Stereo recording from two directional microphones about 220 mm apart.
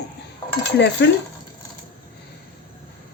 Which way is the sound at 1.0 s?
55° left (ahead or behind).